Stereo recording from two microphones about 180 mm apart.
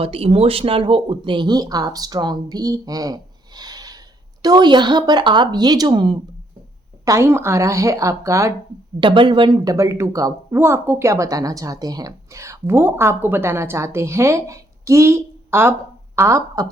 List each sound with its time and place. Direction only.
0.0 s speech: 30° right (ahead or behind); by 16.6 s 15° right (ahead or behind)